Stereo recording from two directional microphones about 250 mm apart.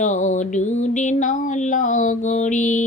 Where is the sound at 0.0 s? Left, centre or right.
Left.